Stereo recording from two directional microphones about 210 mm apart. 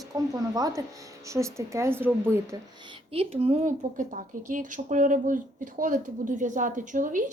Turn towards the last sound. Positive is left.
turn(degrees=-40)  # may be behind; listen again after turning